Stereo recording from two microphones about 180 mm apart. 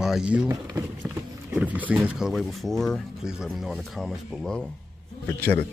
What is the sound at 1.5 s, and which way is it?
Speech, 10° right (ahead or behind).